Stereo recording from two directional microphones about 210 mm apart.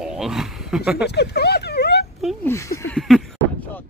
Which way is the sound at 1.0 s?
50° left (ahead or behind).